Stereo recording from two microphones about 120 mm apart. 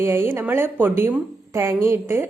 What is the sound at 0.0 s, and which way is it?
A woman's voice, 20° right (ahead or behind).